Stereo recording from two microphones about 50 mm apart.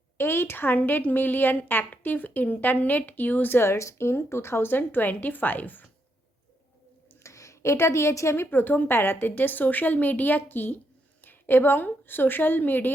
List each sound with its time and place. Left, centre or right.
0.2 s a woman's voice: left
3.6 s speech: left
4.8 s a woman's voice: left
7.2 s a woman's voice: left
8.4 s a woman's voice: left